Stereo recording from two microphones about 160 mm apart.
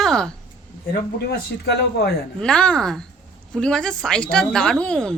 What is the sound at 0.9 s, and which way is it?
Speech, 80° left.